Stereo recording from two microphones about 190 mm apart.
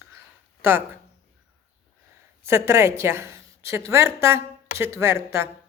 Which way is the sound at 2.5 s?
15° right (ahead or behind).